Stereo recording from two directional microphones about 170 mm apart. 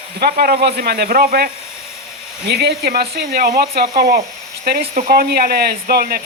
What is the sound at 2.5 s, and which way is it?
Speech, 75° right (ahead or behind).